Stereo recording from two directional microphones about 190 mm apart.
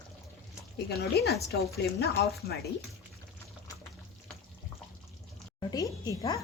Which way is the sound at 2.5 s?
55° left (ahead or behind).